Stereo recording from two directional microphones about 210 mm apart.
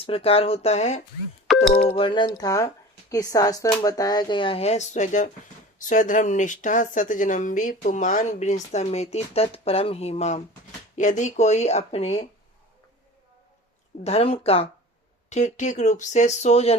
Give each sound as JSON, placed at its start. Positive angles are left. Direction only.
{"t": 0.0, "sound": "speech", "side_deg": 25}
{"t": 1.5, "sound": "a sound", "side_deg": 0}
{"t": 1.9, "sound": "speech", "side_deg": 25}
{"t": 14.0, "sound": "speech", "side_deg": 30}